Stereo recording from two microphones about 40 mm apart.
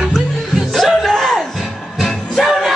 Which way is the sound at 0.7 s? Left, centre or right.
Centre.